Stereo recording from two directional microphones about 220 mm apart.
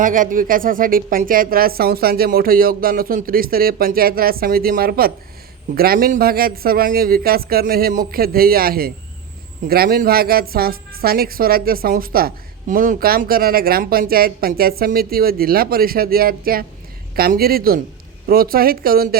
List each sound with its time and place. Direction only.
0.0 s a woman's voice: 35° right (ahead or behind)